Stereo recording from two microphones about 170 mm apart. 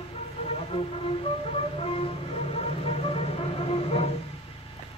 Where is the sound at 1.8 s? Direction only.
35° left (ahead or behind).